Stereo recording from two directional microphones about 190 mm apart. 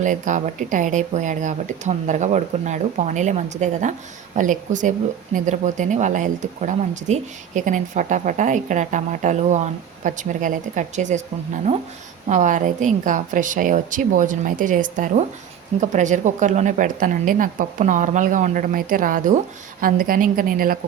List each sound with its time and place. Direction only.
0.0 s speech: 40° right (ahead or behind)
12.3 s a woman's voice: 40° right (ahead or behind)